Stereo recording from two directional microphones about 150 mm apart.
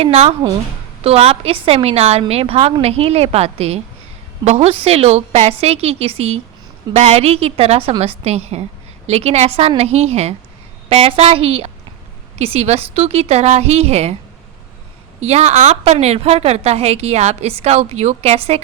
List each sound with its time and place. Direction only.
0.0 s a woman's voice: 45° right (ahead or behind)
15.2 s a woman's voice: 45° right (ahead or behind)